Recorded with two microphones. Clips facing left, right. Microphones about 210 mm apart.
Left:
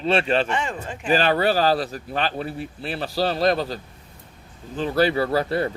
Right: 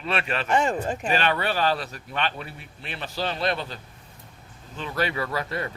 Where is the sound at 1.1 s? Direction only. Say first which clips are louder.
Left 7 dB; 35° left (ahead or behind).